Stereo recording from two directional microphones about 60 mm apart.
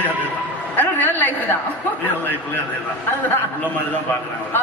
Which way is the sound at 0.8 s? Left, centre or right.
Left.